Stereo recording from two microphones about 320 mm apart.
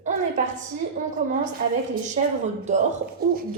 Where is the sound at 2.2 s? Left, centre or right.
Right.